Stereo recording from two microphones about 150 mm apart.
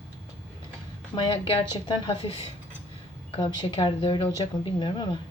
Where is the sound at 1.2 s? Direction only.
35° left (ahead or behind).